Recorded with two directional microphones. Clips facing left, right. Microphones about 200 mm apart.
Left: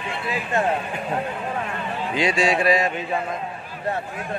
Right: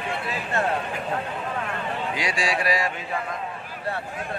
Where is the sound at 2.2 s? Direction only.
25° left (ahead or behind).